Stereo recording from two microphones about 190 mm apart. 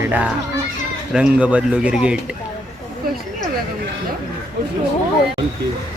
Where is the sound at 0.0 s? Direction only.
10° right (ahead or behind).